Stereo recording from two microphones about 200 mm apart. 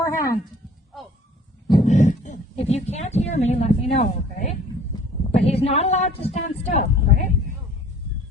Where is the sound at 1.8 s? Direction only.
35° left (ahead or behind).